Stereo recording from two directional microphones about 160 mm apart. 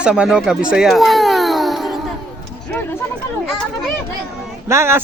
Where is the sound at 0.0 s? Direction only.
5° right (ahead or behind).